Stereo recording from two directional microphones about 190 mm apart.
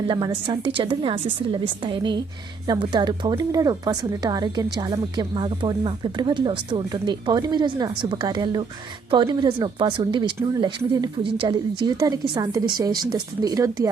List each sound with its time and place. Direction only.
0.1 s speech: 25° right (ahead or behind)